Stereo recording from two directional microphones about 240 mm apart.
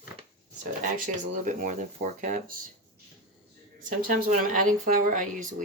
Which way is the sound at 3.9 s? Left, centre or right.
Right.